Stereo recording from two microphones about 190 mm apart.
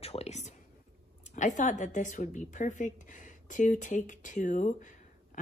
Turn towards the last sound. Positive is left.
turn(degrees=40)  # may be behind; listen again after turning